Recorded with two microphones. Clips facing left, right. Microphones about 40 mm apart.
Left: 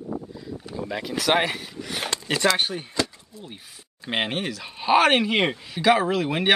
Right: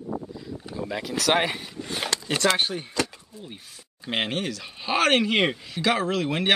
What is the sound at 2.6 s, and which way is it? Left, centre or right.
Speech, centre.